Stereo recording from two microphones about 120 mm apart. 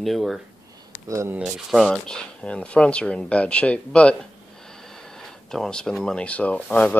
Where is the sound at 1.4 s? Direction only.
Centre (ahead or behind).